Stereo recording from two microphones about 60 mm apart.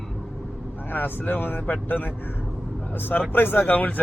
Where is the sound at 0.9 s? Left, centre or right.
Left.